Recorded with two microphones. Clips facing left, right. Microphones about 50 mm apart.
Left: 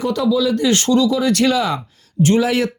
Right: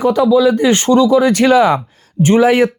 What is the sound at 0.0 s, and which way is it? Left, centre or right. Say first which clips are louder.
Speech: right 7 dB; centre.